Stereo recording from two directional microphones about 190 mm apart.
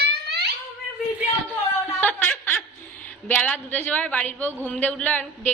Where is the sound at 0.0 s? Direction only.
60° right (ahead or behind).